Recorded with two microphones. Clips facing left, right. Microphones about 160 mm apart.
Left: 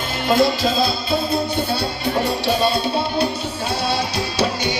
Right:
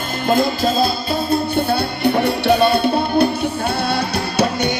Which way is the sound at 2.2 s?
60° right (ahead or behind).